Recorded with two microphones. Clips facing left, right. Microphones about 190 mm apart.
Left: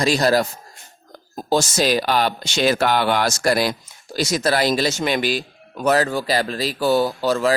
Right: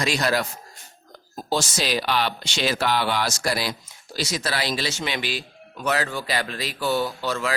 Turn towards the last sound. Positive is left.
turn(degrees=40)  # may be behind; listen again after turning